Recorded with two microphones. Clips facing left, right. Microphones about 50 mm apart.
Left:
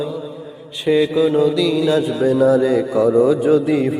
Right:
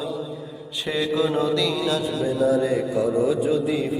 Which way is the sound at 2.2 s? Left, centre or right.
Left.